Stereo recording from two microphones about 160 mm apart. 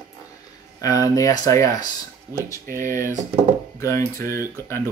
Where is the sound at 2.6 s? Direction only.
60° right (ahead or behind).